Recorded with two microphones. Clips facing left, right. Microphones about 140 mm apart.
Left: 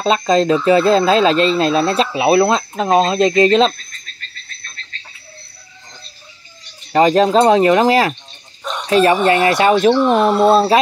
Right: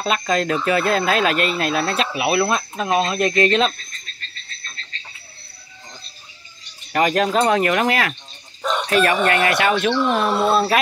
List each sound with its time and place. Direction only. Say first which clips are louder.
0.0 s speech: left 6 dB; 30° left (ahead or behind)
6.9 s speech: left 6 dB; 30° left (ahead or behind)